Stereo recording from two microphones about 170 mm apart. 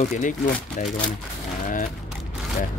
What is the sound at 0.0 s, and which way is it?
Speech, 45° left (ahead or behind).